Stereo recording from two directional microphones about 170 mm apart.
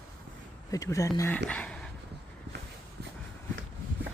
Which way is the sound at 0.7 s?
20° left (ahead or behind).